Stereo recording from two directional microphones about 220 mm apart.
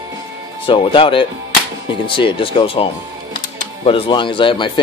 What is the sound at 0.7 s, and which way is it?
Speech, 25° left (ahead or behind).